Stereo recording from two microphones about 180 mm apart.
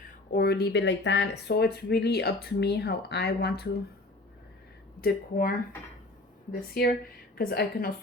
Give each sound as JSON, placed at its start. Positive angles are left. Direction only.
{"t": 0.0, "sound": "speech", "side_deg": 55}
{"t": 4.9, "sound": "speech", "side_deg": 55}